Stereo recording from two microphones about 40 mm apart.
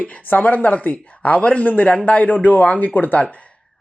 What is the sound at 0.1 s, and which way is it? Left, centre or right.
Speech, left.